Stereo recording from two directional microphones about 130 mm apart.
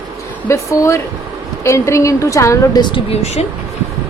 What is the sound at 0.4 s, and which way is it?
A woman's voice, 25° left (ahead or behind).